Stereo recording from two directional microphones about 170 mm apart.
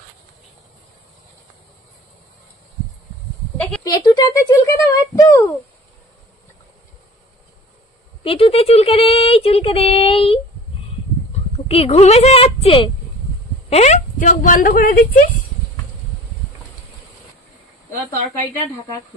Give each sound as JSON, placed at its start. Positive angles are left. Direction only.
{"t": 3.5, "sound": "a sound", "side_deg": 5}
{"t": 3.8, "sound": "speech", "side_deg": 20}
{"t": 8.2, "sound": "child singing", "side_deg": 35}
{"t": 11.5, "sound": "speech", "side_deg": 35}
{"t": 13.7, "sound": "speech", "side_deg": 40}